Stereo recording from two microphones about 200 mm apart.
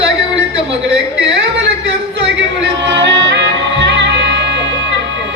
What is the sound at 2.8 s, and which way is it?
Music, 65° right (ahead or behind).